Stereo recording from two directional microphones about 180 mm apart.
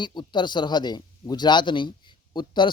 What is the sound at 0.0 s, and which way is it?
Speech, 25° left (ahead or behind).